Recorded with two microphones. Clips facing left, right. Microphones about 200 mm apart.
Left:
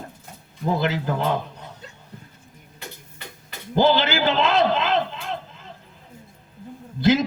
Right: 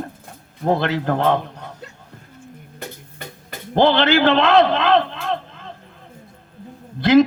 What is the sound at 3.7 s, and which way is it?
A man's voice, 60° right (ahead or behind).